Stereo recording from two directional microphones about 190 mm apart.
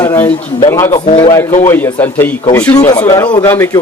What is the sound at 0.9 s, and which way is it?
Speech, 30° left (ahead or behind).